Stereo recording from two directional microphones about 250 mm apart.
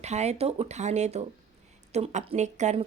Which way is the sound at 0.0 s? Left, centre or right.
Right.